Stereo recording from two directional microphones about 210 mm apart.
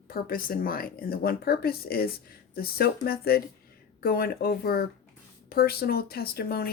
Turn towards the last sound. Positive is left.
turn(degrees=45)  # may be behind; listen again after turning